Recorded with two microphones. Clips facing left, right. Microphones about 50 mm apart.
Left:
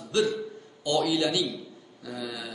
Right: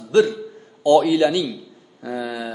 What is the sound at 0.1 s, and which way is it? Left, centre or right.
A man's voice, right.